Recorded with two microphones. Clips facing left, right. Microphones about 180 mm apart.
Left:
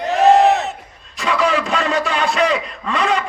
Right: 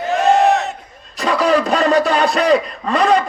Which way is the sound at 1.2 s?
40° right (ahead or behind).